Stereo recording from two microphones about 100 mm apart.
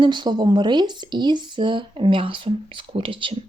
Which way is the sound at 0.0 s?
50° right (ahead or behind).